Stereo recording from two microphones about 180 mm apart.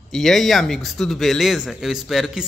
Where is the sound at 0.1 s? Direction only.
Centre (ahead or behind).